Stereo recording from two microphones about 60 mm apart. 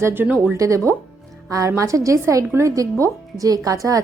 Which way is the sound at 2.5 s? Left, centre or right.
Right.